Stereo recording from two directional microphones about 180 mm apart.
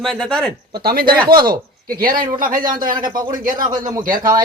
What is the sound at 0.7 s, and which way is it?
Speech, 60° right (ahead or behind).